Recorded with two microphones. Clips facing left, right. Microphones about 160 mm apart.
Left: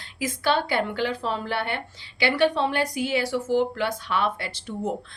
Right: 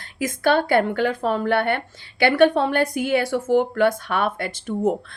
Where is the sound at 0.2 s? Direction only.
50° right (ahead or behind).